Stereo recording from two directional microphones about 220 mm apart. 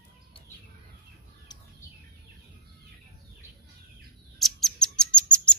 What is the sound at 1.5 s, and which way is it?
Bird, 20° left (ahead or behind).